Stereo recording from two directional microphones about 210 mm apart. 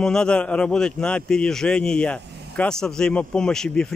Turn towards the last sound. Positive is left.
turn(degrees=5)  # may be behind; listen again after turning